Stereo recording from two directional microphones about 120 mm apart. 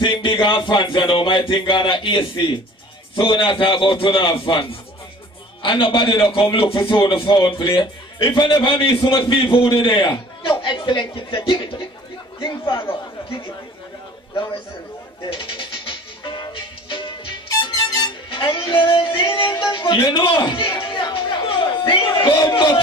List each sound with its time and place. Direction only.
0.0 s a man's voice: 45° left (ahead or behind)
15.2 s music: 50° left (ahead or behind)
17.5 s music: 30° left (ahead or behind)
18.3 s a man's voice: 45° left (ahead or behind)